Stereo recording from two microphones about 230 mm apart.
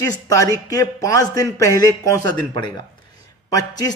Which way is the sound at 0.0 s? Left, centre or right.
Centre.